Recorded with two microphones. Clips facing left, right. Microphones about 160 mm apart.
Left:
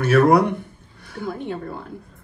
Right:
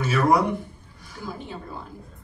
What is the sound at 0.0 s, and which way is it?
A woman's voice, 60° left (ahead or behind).